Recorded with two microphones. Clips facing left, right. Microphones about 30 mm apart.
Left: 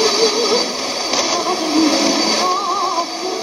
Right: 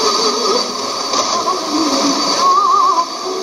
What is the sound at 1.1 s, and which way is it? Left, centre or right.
Music, left.